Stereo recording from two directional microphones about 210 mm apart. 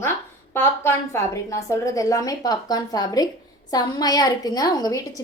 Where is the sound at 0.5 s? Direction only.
10° left (ahead or behind).